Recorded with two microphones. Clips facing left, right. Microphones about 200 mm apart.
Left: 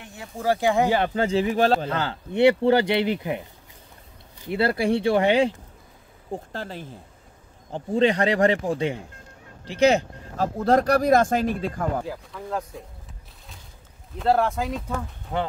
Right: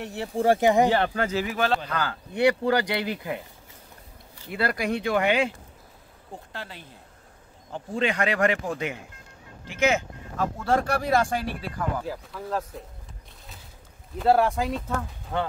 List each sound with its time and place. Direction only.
0.2 s speech: 25° right (ahead or behind)
0.8 s speech: 10° left (ahead or behind)
1.1 s speech: 30° left (ahead or behind)
6.5 s speech: 45° left (ahead or behind)
12.1 s speech: centre (ahead or behind)
14.1 s speech: 5° right (ahead or behind)
15.3 s speech: 15° left (ahead or behind)